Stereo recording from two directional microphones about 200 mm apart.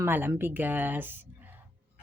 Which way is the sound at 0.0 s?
10° right (ahead or behind).